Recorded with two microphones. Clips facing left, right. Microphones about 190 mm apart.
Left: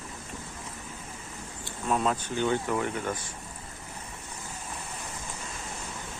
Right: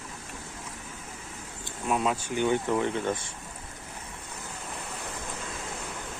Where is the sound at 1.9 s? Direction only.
5° right (ahead or behind); by 3.2 s 25° right (ahead or behind).